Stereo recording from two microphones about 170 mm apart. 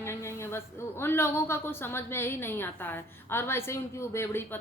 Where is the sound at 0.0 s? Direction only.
15° left (ahead or behind).